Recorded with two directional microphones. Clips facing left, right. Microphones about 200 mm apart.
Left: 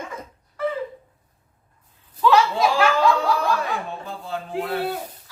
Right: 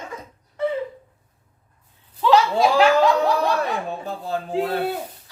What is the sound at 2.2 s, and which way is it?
Speech, 25° right (ahead or behind).